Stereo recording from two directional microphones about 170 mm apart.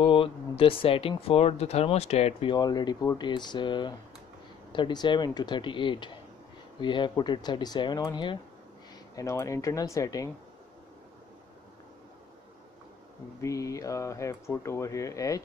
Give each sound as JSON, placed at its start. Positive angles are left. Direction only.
{"t": 0.0, "sound": "speech", "side_deg": 30}
{"t": 2.5, "sound": "speech", "side_deg": 25}
{"t": 13.4, "sound": "speech", "side_deg": 20}